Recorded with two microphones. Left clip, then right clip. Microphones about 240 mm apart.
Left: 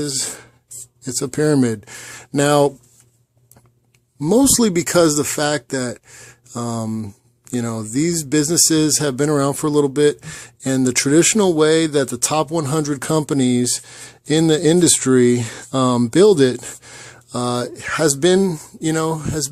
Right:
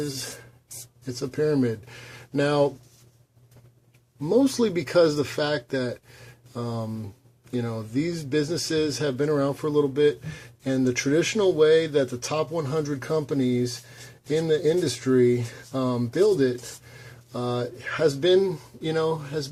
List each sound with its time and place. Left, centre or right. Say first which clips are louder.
1.0 s speech: left 7 dB; left
4.2 s speech: left 6 dB; left